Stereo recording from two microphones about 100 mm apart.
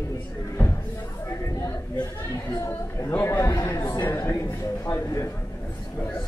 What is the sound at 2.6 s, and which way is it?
Speech, 25° left (ahead or behind).